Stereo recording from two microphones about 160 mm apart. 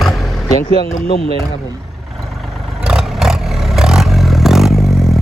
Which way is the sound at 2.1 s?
Centre (ahead or behind).